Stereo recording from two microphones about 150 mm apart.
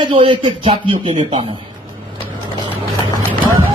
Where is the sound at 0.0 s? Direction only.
30° right (ahead or behind).